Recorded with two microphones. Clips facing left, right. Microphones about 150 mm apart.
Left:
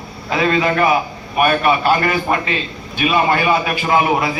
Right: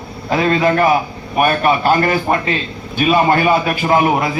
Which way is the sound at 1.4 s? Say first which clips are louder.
Right 1 dB; 40° right (ahead or behind).